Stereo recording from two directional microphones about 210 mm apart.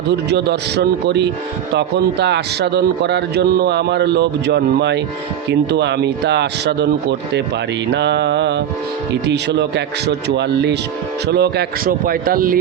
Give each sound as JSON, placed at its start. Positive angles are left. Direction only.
{"t": 0.1, "sound": "a man's voice", "side_deg": -50}